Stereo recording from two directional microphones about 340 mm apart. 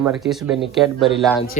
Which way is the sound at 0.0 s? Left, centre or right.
Centre.